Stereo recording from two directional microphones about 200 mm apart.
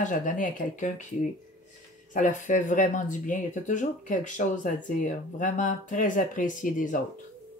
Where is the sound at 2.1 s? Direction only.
40° left (ahead or behind).